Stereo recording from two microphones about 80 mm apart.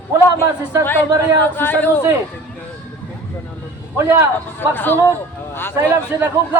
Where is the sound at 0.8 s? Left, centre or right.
Left.